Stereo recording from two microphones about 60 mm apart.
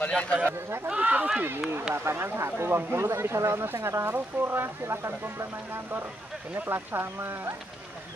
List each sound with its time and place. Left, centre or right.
0.1 s speech: centre
0.8 s speech: right
2.0 s speech: right
6.5 s speech: right